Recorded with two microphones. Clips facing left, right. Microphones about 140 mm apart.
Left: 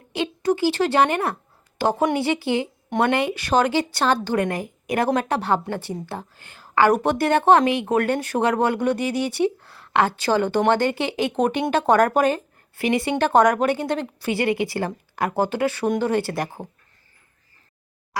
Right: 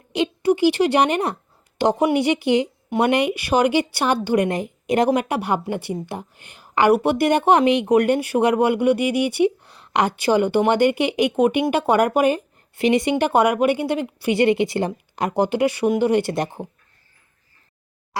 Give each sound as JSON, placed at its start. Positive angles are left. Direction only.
{"t": 0.1, "sound": "a woman's voice", "side_deg": -15}